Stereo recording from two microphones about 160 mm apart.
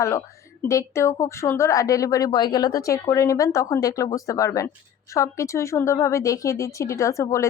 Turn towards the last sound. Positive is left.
turn(degrees=20)  # may be behind; listen again after turning